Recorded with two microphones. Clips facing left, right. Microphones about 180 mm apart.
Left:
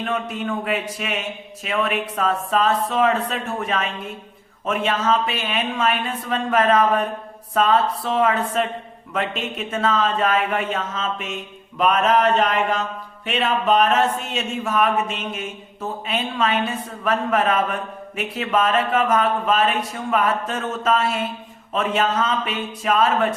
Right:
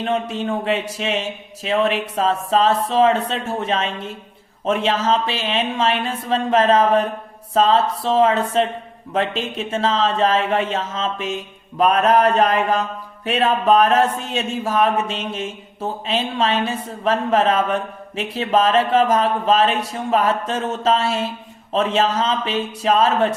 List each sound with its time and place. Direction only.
0.0 s speech: 30° right (ahead or behind)
11.8 s mantra: 35° right (ahead or behind)
13.2 s speech: 35° right (ahead or behind)